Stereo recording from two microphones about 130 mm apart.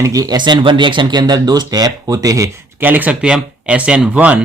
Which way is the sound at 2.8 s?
15° right (ahead or behind).